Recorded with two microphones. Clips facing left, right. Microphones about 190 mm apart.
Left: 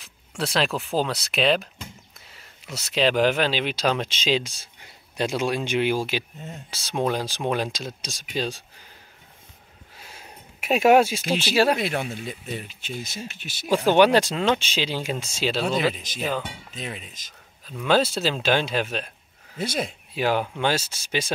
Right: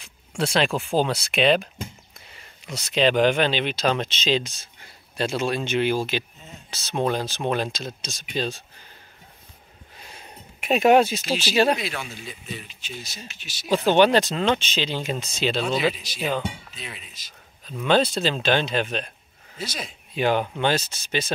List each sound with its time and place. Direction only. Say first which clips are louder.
0.4 s speech: right 2 dB; centre (ahead or behind)
9.9 s a sound: right 1 dB; 5° left (ahead or behind)
11.5 s speech: even; 5° left (ahead or behind)
11.8 s speech: left 5 dB; 55° left (ahead or behind)
13.2 s speech: left 5 dB; 10° left (ahead or behind)
15.8 s speech: even; 45° left (ahead or behind)
16.2 s speech: right 2 dB; centre (ahead or behind)
16.7 s speech: left 5 dB; 45° left (ahead or behind)
17.6 s speech: right 1 dB; 5° left (ahead or behind)
19.6 s speech: left 6 dB; 55° left (ahead or behind)
20.2 s speech: right 1 dB; 5° left (ahead or behind)